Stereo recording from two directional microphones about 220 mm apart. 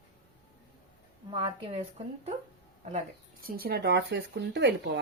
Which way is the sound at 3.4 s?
40° right (ahead or behind).